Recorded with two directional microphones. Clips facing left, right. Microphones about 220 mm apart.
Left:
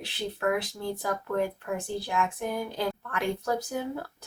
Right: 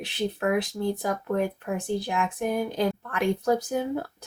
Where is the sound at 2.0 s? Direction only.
15° right (ahead or behind).